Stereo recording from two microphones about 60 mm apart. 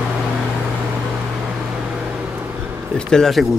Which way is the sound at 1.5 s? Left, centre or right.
Centre.